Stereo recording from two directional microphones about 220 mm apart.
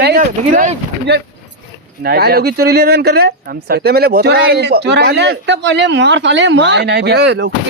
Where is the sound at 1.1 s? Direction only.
50° right (ahead or behind).